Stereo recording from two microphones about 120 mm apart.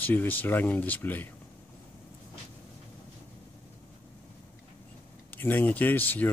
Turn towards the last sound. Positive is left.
turn(degrees=15)  # may be behind; listen again after turning